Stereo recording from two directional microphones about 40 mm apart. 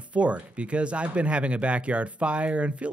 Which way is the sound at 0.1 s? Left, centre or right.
Right.